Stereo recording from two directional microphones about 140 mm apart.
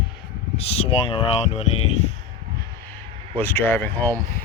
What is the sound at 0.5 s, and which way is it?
Speech, 45° left (ahead or behind).